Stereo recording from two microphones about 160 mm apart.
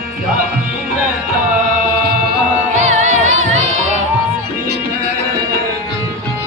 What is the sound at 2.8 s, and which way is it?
Music, 50° right (ahead or behind).